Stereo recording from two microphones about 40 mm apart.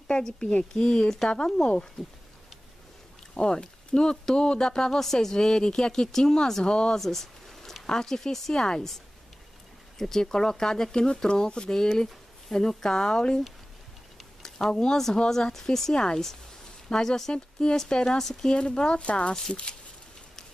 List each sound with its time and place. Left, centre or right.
0.5 s speech: left
0.8 s speech: centre
1.3 s speech: left
3.3 s speech: left
7.0 s a sound: centre
7.8 s speech: centre
9.9 s speech: centre
14.4 s speech: centre
18.5 s speech: left